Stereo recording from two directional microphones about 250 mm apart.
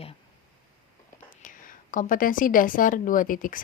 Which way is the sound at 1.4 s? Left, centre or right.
Left.